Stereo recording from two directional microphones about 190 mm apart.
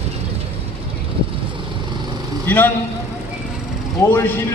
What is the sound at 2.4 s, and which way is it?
Speech, 10° left (ahead or behind).